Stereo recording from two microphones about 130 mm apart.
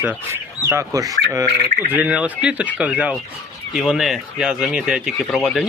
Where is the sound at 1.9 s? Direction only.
10° right (ahead or behind).